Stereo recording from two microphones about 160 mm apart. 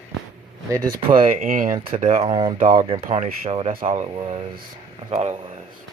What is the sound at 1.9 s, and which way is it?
Speech, 45° right (ahead or behind).